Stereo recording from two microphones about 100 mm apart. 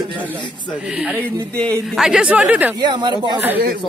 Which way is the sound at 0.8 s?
10° right (ahead or behind).